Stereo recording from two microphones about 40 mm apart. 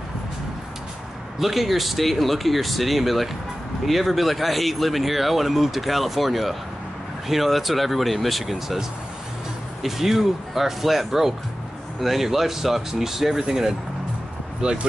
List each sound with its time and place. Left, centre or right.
1.4 s speech: centre
9.8 s speech: centre